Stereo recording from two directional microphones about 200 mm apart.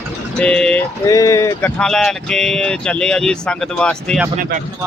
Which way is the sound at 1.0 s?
15° left (ahead or behind).